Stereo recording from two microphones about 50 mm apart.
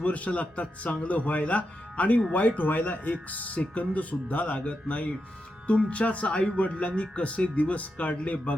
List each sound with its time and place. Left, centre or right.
0.0 s speech: left